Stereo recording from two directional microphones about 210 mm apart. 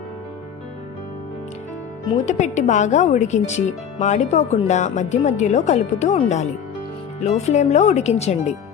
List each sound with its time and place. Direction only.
2.2 s a woman's voice: 35° left (ahead or behind)